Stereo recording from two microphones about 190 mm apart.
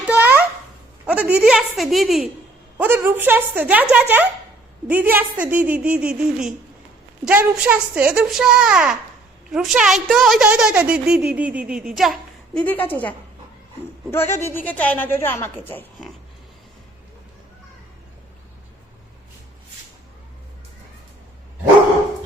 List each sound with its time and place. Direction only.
0.1 s a sound: 10° right (ahead or behind)
1.0 s a woman's voice: 5° right (ahead or behind)
12.5 s a woman's voice: 10° left (ahead or behind)